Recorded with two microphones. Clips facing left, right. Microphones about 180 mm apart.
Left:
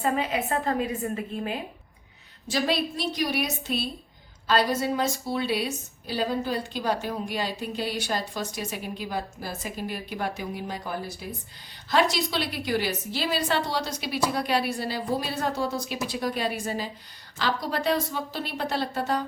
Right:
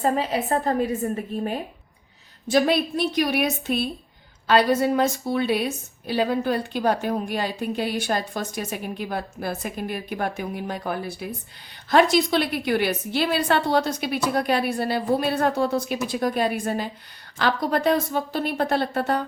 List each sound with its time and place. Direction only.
0.0 s a woman's voice: 35° right (ahead or behind)
2.5 s a woman's voice: 55° right (ahead or behind)